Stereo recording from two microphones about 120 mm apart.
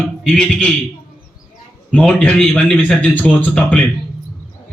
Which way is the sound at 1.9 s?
10° left (ahead or behind).